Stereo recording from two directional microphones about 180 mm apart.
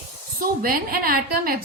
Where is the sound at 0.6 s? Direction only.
55° right (ahead or behind).